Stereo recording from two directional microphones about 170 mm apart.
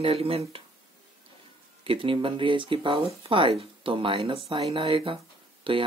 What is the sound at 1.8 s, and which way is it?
Speech, 30° right (ahead or behind).